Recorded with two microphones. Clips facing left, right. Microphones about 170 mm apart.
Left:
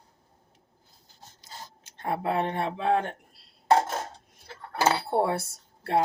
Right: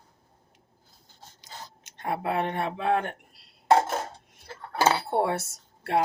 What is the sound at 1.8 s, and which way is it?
Speech, 30° left (ahead or behind).